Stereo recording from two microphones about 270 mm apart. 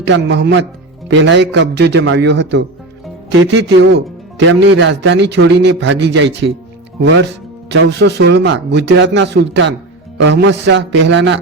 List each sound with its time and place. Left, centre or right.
0.0 s speech: right